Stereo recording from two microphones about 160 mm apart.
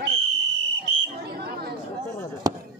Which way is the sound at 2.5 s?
25° right (ahead or behind).